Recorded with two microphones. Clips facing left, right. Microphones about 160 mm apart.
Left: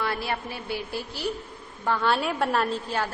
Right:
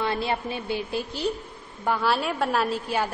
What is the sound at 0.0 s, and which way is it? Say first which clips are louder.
A woman's voice: right 3 dB; 20° right (ahead or behind).